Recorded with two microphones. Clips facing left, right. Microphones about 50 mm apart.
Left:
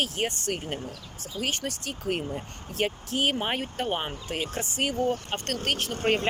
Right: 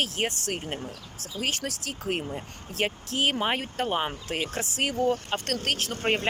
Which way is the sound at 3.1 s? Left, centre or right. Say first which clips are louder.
Right 3 dB; right.